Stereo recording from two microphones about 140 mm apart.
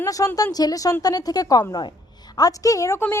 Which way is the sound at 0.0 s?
25° left (ahead or behind).